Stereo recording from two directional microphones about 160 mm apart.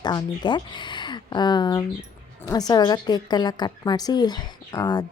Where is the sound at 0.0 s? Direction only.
25° left (ahead or behind).